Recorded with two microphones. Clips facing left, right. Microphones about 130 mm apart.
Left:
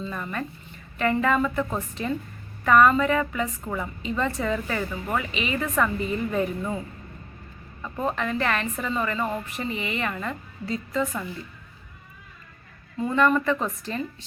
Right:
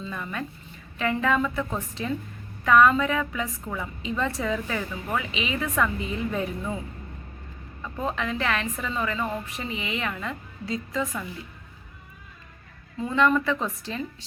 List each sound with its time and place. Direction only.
0.0 s a woman's voice: centre (ahead or behind)
7.8 s a woman's voice: 5° left (ahead or behind)
13.0 s a woman's voice: centre (ahead or behind)